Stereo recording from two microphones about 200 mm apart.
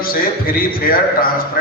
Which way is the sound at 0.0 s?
45° left (ahead or behind).